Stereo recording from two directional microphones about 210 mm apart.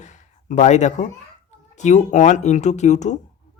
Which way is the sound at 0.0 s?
35° left (ahead or behind).